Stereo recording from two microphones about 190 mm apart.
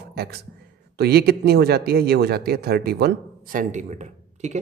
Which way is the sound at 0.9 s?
55° right (ahead or behind).